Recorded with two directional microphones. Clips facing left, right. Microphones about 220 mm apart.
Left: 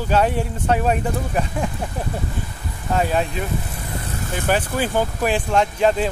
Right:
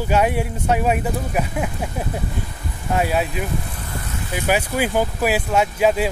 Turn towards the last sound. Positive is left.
turn(degrees=-5)  # may be behind; listen again after turning